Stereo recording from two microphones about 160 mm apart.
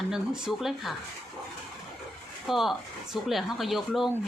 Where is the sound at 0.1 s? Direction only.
5° right (ahead or behind).